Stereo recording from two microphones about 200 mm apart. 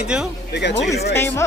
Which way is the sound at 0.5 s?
60° left (ahead or behind).